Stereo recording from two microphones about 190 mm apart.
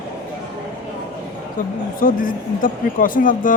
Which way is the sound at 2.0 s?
45° left (ahead or behind).